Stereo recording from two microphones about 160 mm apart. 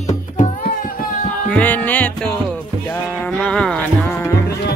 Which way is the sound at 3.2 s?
5° left (ahead or behind).